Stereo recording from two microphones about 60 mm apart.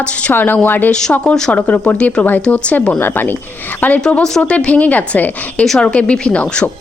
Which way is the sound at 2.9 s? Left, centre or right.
Left.